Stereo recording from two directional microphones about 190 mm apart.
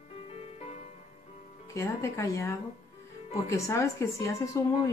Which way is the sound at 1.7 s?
15° left (ahead or behind).